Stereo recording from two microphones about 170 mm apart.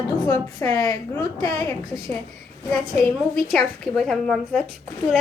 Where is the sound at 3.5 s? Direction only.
Centre (ahead or behind).